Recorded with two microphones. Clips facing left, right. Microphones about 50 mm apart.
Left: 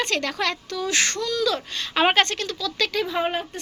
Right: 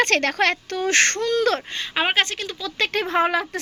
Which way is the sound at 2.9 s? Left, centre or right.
Right.